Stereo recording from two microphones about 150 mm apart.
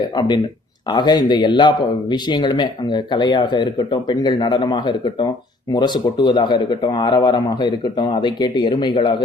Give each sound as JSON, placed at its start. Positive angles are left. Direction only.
{"t": 0.9, "sound": "a man's voice", "side_deg": 30}